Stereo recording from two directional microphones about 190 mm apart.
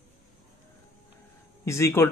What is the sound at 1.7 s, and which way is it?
Speech, 15° left (ahead or behind).